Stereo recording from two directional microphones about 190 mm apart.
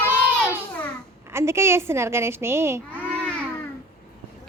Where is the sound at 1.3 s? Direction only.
15° right (ahead or behind).